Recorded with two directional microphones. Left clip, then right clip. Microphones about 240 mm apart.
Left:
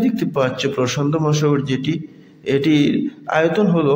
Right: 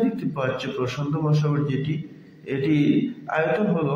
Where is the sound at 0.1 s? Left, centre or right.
Left.